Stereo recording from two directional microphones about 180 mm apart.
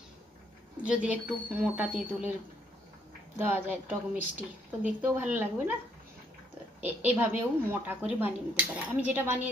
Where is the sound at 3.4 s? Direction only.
10° right (ahead or behind).